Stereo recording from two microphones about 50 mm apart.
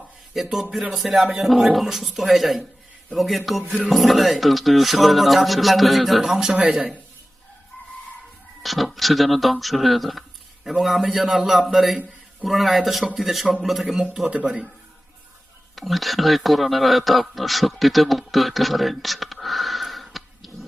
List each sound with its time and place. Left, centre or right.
0.4 s speech: centre
8.6 s speech: centre
13.8 s speech: centre
15.7 s speech: centre